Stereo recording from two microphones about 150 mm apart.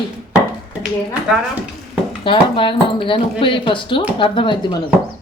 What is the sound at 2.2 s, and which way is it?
Speech, 35° left (ahead or behind).